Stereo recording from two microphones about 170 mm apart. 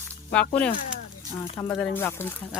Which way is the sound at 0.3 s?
10° left (ahead or behind).